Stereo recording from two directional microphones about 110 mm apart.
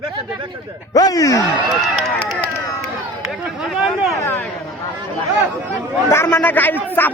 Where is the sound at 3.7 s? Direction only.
5° right (ahead or behind).